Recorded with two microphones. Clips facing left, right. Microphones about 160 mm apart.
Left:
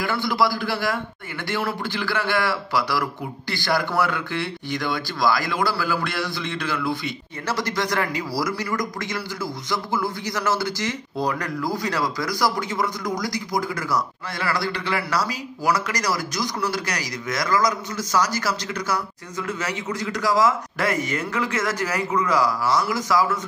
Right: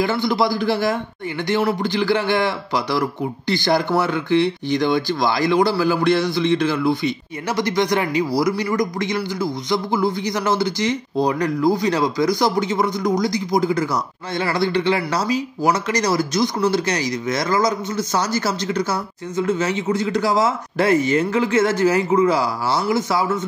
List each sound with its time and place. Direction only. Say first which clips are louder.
0.0 s a man's voice: right 4 dB; 20° right (ahead or behind)